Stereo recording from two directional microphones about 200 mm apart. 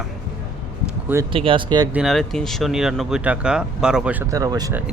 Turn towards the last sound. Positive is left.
turn(degrees=-20)  # may be behind; listen again after turning